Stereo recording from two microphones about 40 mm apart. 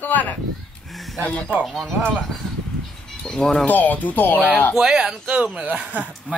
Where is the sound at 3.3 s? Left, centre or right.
Centre.